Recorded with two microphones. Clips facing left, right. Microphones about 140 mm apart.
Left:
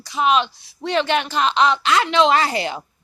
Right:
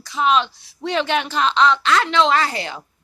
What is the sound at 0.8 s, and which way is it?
A woman's voice, 5° right (ahead or behind).